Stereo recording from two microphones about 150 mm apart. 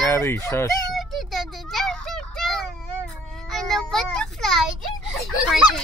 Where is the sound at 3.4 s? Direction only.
Centre (ahead or behind).